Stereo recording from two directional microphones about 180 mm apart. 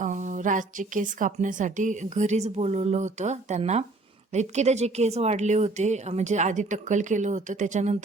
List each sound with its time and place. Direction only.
0.0 s a woman's voice: 45° right (ahead or behind)